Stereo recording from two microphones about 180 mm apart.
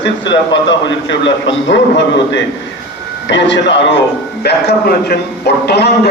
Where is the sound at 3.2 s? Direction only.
85° left.